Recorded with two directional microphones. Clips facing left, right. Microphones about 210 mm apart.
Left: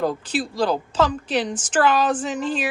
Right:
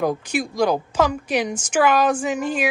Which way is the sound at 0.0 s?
10° right (ahead or behind).